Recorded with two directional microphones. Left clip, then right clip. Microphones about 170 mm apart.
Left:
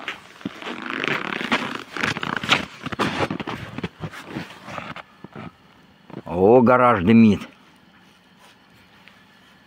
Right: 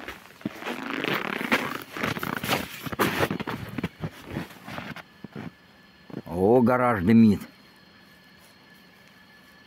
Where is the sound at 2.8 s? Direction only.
65° left (ahead or behind).